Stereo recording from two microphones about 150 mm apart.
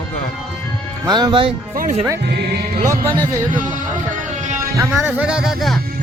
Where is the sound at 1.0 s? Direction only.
30° right (ahead or behind).